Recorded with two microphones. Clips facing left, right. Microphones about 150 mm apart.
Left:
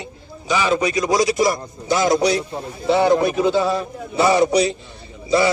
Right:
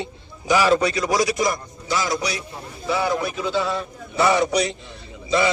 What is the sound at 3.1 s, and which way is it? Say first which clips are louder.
Speech: left 8 dB; 50° left (ahead or behind).